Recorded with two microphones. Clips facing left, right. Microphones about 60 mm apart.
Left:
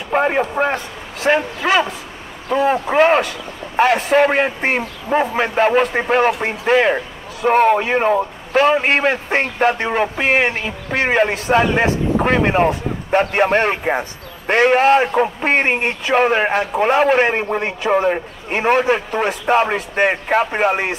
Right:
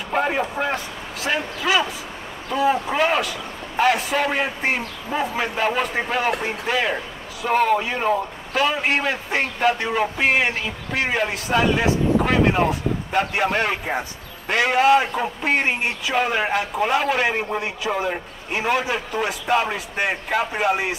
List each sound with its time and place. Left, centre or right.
0.1 s a man's voice: left
1.2 s a man's voice: left
7.4 s a man's voice: left
12.2 s speech: left
13.3 s a man's voice: left
19.4 s speech: left